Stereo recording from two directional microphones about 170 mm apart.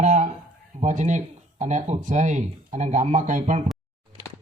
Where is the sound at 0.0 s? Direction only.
45° right (ahead or behind).